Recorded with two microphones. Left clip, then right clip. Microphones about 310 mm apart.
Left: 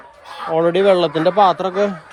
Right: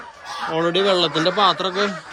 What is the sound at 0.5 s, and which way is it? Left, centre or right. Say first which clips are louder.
Speech: left 5 dB; centre.